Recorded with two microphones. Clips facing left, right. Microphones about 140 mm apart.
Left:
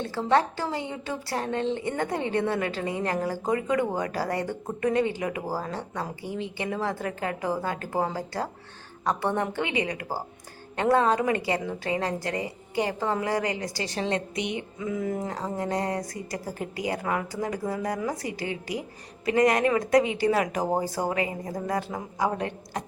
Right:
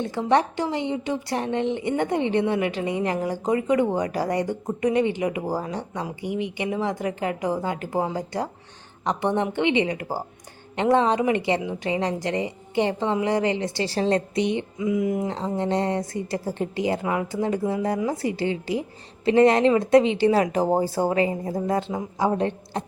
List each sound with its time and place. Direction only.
0.0 s a woman's voice: 20° right (ahead or behind)
14.8 s music: 15° right (ahead or behind)
15.5 s a woman's voice: 25° right (ahead or behind)